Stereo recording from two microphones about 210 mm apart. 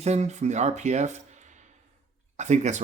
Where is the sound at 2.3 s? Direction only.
35° right (ahead or behind).